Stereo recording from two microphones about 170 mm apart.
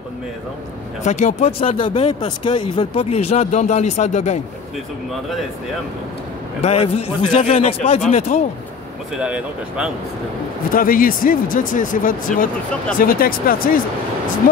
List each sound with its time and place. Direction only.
1.0 s speech: 45° left (ahead or behind)
6.6 s speech: 40° left (ahead or behind)
9.2 s speech: 5° right (ahead or behind)
10.7 s speech: 55° left (ahead or behind)